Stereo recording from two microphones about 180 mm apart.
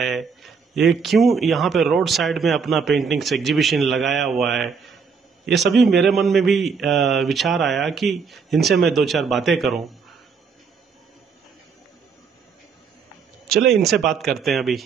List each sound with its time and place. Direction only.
0.0 s speech: centre (ahead or behind)
13.5 s speech: centre (ahead or behind)